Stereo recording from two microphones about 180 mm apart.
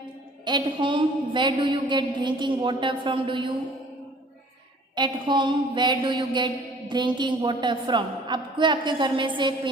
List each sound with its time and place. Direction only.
0.4 s a woman's voice: 25° right (ahead or behind)
4.9 s a woman's voice: 25° right (ahead or behind)